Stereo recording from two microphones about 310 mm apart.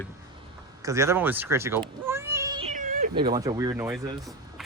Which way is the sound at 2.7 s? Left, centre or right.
Right.